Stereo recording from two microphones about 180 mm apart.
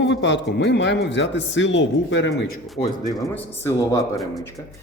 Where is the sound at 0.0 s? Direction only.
80° left.